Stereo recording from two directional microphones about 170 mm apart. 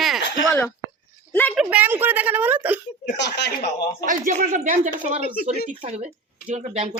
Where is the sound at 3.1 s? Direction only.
90° left.